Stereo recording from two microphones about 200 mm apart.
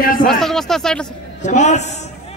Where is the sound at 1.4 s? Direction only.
35° left (ahead or behind).